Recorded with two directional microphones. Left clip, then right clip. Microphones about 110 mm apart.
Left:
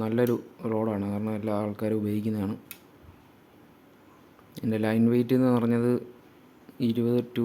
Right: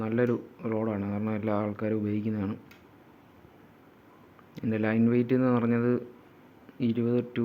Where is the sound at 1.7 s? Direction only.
45° left (ahead or behind).